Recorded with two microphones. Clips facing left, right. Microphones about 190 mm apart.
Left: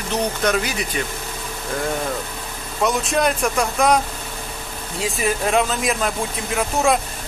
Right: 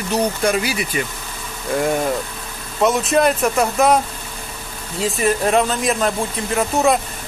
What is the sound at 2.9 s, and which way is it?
Speech, centre (ahead or behind).